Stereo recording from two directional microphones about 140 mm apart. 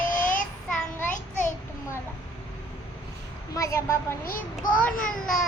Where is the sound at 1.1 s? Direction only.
65° left (ahead or behind).